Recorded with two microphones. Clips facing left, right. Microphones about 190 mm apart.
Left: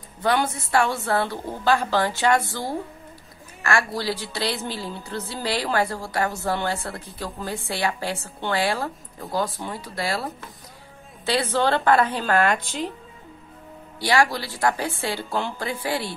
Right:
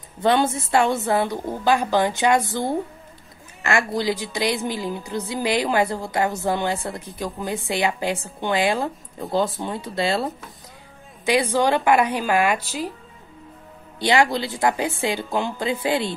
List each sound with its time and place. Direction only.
0.2 s a woman's voice: 25° right (ahead or behind); by 12.9 s 5° right (ahead or behind)
13.9 s a woman's voice: 20° right (ahead or behind)